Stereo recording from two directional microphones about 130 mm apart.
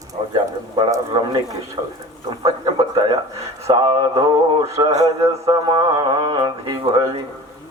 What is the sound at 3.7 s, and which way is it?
Speech, 45° right (ahead or behind).